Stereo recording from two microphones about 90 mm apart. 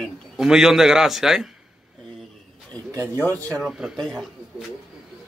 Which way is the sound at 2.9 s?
35° right (ahead or behind).